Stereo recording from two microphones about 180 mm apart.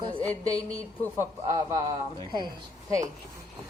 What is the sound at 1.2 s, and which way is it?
A man's voice, 20° right (ahead or behind).